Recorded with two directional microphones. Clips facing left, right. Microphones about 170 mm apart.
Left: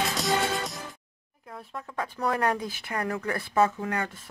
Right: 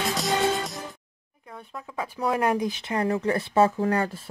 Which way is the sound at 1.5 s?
Centre (ahead or behind).